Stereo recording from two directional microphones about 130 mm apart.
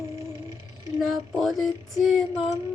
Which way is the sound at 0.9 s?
Centre (ahead or behind).